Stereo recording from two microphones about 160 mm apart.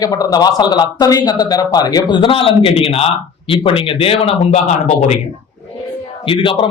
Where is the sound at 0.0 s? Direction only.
25° left (ahead or behind).